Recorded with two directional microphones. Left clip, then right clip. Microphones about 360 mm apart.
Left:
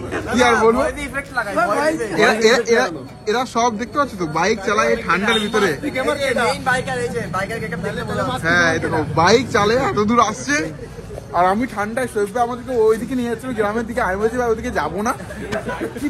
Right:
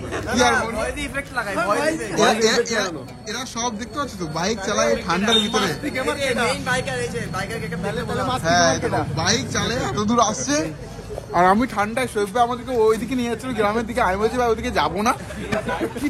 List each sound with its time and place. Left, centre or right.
0.4 s speech: centre
6.6 s speech: centre
7.3 s speech: centre
11.3 s speech: right
11.7 s speech: centre